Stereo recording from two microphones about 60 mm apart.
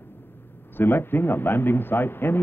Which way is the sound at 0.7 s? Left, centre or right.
Left.